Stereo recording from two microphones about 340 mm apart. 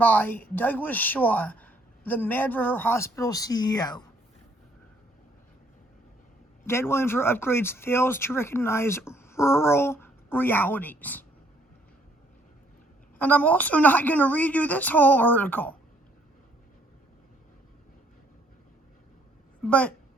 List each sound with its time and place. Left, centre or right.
0.0 s a woman's voice: centre
6.7 s speech: centre
13.1 s a woman's voice: centre
19.6 s a woman's voice: centre